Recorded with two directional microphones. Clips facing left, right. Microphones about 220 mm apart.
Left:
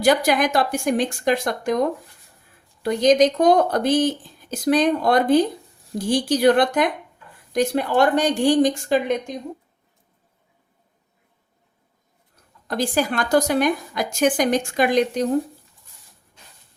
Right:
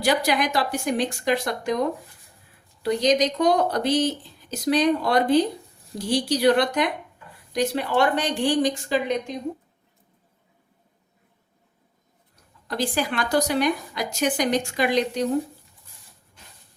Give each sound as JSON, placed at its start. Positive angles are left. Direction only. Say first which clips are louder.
{"t": 0.0, "sound": "speech", "louder": "left 4 dB", "side_deg": 50}
{"t": 2.8, "sound": "speech", "louder": "left 5 dB", "side_deg": 50}
{"t": 12.6, "sound": "speech", "louder": "left 4 dB", "side_deg": 45}